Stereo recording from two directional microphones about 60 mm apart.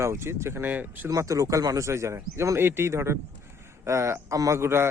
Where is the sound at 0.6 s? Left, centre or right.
Right.